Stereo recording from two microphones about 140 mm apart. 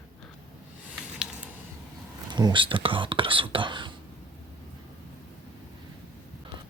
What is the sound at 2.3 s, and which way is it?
Speech, 30° right (ahead or behind).